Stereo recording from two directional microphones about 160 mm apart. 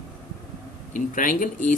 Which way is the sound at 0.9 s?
55° left (ahead or behind).